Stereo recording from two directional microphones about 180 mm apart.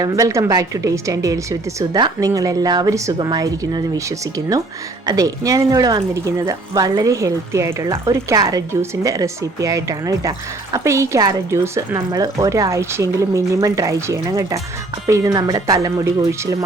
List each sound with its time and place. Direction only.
0.0 s a woman's voice: 20° right (ahead or behind)